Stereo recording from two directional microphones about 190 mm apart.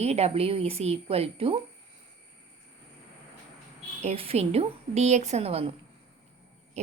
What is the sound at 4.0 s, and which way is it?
A woman's voice, 30° right (ahead or behind).